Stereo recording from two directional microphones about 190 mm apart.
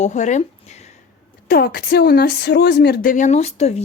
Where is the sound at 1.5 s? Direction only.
55° left (ahead or behind).